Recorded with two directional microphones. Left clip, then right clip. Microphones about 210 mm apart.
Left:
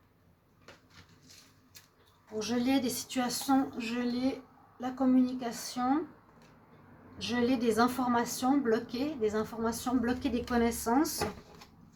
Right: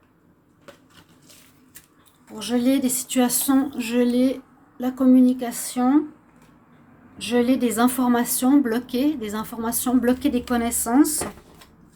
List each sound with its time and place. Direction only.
2.4 s a woman's voice: 40° right (ahead or behind)
7.2 s a woman's voice: 45° right (ahead or behind)